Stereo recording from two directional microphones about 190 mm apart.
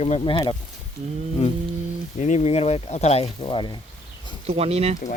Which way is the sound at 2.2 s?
35° left (ahead or behind).